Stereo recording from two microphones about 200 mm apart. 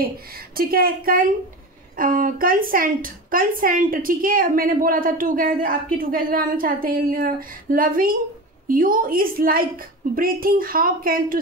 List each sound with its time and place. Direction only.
0.6 s a woman's voice: 45° right (ahead or behind)